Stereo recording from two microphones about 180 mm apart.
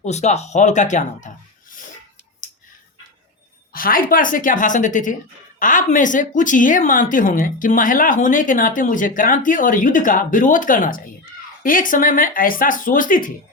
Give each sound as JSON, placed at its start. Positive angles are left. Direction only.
{"t": 0.0, "sound": "speech", "side_deg": 40}
{"t": 3.7, "sound": "a woman's voice", "side_deg": 50}